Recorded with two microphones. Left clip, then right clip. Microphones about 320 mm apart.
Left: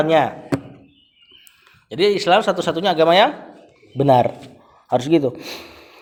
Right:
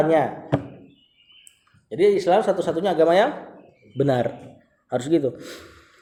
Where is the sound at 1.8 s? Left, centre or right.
Left.